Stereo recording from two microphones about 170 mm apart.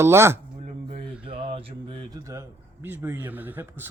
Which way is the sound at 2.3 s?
15° right (ahead or behind).